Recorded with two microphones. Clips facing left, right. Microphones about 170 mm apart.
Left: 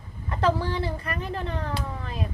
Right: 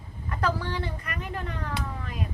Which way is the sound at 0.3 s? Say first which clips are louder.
Left 4 dB; 30° left (ahead or behind).